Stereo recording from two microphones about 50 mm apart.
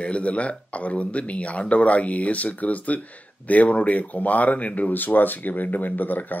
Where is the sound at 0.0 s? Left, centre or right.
Left.